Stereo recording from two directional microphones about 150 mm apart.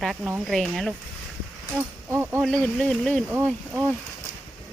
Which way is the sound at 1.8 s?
15° right (ahead or behind).